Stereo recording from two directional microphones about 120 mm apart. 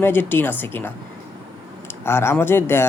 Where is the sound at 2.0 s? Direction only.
20° left (ahead or behind).